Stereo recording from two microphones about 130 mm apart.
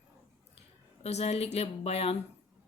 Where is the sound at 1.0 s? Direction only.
50° left (ahead or behind).